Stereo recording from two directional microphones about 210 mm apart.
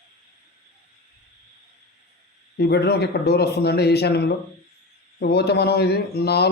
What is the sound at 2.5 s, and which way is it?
A man's voice, 50° left (ahead or behind).